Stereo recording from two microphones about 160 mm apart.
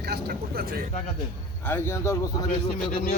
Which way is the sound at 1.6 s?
15° left (ahead or behind).